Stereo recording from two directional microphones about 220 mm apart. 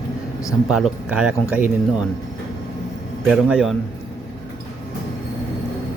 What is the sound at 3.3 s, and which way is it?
Speech, 5° right (ahead or behind).